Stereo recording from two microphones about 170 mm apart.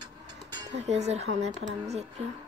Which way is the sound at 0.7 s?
40° right (ahead or behind).